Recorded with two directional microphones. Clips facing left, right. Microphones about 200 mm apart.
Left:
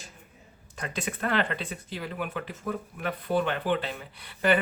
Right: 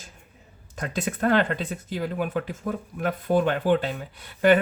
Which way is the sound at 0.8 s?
45° right (ahead or behind).